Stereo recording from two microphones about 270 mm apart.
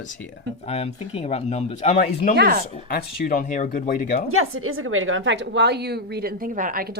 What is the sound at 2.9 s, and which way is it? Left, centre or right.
Speech, left.